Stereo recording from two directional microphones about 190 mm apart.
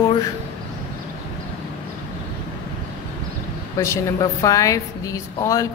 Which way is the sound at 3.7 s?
15° left (ahead or behind).